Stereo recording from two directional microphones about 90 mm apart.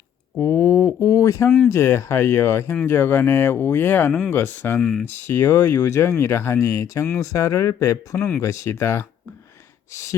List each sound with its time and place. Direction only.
0.3 s speech: 35° left (ahead or behind)
4.8 s speech: 5° left (ahead or behind)
5.2 s speech: 25° left (ahead or behind)